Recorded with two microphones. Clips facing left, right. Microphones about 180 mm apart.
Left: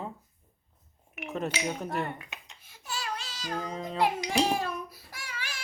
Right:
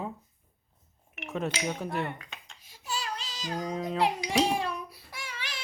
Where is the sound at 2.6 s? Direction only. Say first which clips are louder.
Right 3 dB; 50° left (ahead or behind).